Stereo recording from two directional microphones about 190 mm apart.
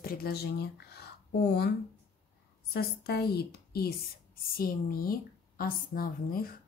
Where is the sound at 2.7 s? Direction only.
55° left (ahead or behind).